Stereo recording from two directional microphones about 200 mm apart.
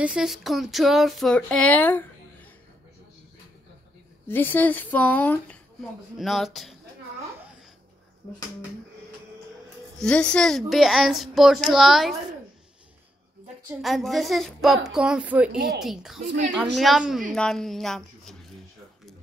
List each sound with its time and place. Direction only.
0.0 s speech: 5° right (ahead or behind)
4.3 s speech: 10° left (ahead or behind)
9.9 s speech: 5° left (ahead or behind)
13.7 s speech: centre (ahead or behind)